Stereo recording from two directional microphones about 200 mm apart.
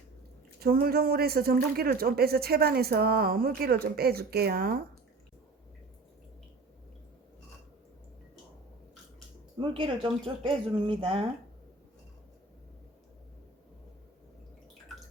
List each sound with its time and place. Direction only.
0.6 s speech: 50° right (ahead or behind)
9.6 s speech: 25° right (ahead or behind)